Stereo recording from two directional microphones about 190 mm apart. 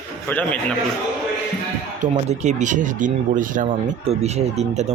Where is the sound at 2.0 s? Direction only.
40° right (ahead or behind).